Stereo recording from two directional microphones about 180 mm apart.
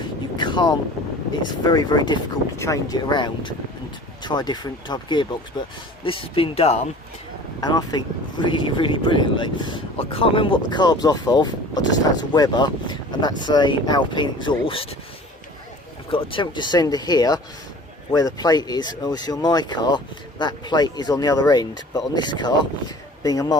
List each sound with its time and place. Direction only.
0.3 s vehicle: 25° left (ahead or behind)
1.3 s speech: 20° left (ahead or behind)
7.6 s speech: 20° left (ahead or behind)
16.0 s speech: 30° left (ahead or behind)